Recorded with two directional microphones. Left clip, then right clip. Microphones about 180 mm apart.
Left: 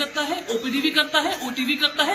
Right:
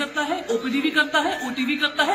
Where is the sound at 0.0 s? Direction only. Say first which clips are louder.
Even; centre (ahead or behind).